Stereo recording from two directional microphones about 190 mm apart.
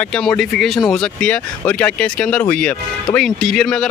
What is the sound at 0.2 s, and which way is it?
Speech, centre (ahead or behind).